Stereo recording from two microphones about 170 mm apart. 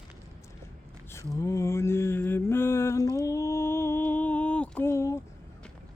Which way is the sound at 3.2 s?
20° left (ahead or behind).